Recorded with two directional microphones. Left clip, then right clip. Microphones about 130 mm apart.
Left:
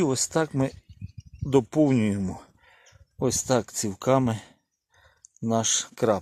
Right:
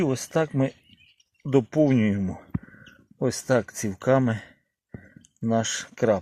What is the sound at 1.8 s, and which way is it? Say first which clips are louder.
Speech: right 1 dB; 25° left (ahead or behind).